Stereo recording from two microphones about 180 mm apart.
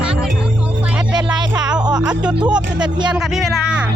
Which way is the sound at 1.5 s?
5° right (ahead or behind).